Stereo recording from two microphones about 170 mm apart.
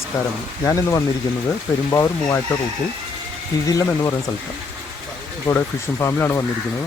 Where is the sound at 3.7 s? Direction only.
20° left (ahead or behind).